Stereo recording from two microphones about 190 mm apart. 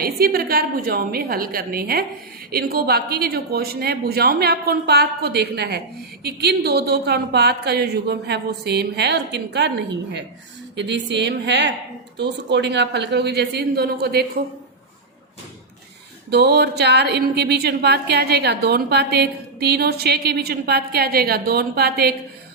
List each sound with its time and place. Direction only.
0.0 s a woman's voice: 55° right (ahead or behind)
16.3 s a woman's voice: 60° right (ahead or behind)